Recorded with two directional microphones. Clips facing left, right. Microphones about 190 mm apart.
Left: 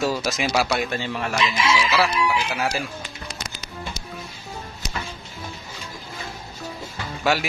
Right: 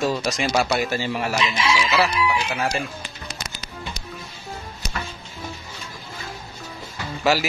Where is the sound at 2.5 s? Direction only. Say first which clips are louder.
Right 1 dB; centre (ahead or behind).